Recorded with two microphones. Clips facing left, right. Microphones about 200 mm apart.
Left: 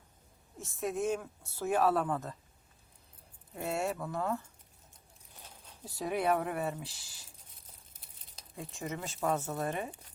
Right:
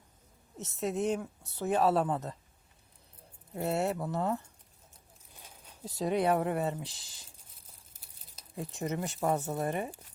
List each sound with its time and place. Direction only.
0.8 s speech: 20° right (ahead or behind)
3.6 s speech: 20° right (ahead or behind)
5.8 s speech: 20° right (ahead or behind)
8.5 s speech: 20° right (ahead or behind)